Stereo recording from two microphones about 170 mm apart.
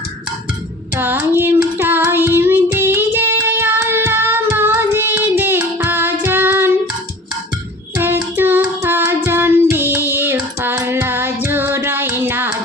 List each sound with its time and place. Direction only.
0.9 s child singing: 10° right (ahead or behind)
7.9 s child singing: 10° right (ahead or behind)